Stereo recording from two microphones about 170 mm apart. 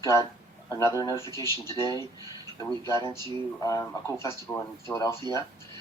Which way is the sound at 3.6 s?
20° left (ahead or behind).